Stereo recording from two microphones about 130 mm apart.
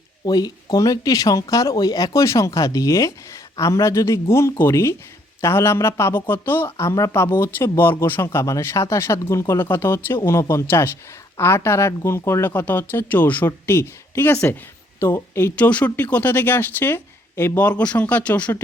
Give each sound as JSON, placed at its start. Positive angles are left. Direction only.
{"t": 0.3, "sound": "speech", "side_deg": 30}